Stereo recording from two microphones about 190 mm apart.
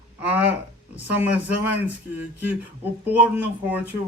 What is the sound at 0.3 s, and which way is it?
Speech, 10° right (ahead or behind).